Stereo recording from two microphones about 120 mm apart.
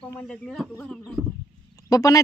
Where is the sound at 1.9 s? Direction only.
30° left (ahead or behind).